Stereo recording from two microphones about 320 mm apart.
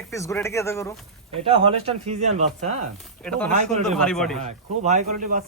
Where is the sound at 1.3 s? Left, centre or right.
Centre.